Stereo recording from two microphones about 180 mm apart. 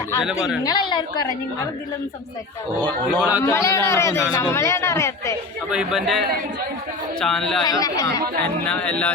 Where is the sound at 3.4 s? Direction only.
15° left (ahead or behind).